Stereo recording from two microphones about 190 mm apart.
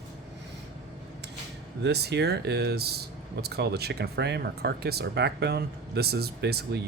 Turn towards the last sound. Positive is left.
turn(degrees=-60)  # may be behind; listen again after turning